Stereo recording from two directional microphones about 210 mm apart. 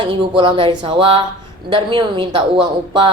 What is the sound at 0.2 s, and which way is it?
Speech, 25° right (ahead or behind).